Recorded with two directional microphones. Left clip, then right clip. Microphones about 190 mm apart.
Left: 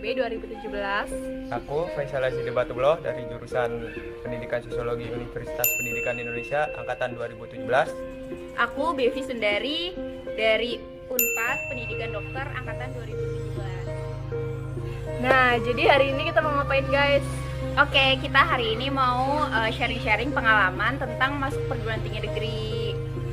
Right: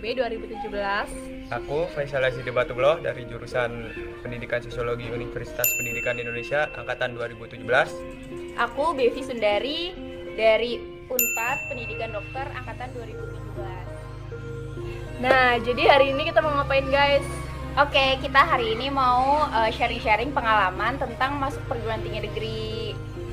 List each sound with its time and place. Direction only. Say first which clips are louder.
0.0 s a woman's voice: even; centre (ahead or behind)
1.5 s speech: right 2 dB; 20° right (ahead or behind)
6.1 s speech: right 1 dB; 15° right (ahead or behind)
8.5 s a woman's voice: right 1 dB; 15° left (ahead or behind)
15.2 s a woman's voice: right 1 dB; centre (ahead or behind)
17.7 s a woman's voice: even; 15° left (ahead or behind)
21.8 s music: right 1 dB; 15° left (ahead or behind)